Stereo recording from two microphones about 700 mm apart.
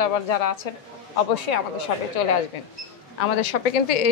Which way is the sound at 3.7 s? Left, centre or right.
Left.